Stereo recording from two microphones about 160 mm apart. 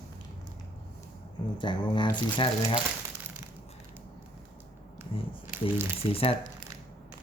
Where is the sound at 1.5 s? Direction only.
30° left (ahead or behind).